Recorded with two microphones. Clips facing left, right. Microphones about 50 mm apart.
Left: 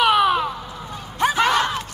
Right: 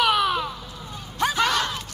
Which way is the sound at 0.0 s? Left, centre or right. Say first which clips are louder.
Left 4 dB; left.